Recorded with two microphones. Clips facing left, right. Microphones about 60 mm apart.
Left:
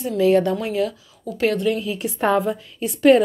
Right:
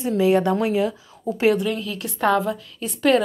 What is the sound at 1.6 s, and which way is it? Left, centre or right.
Speech, centre.